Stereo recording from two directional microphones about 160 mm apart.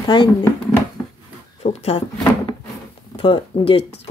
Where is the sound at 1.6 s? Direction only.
35° left (ahead or behind).